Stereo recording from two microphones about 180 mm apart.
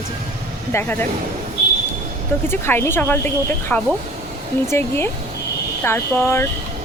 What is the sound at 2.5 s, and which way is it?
Speech, 15° left (ahead or behind).